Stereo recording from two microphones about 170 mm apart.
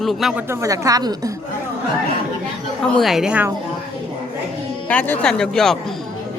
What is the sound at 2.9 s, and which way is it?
Speech, centre (ahead or behind).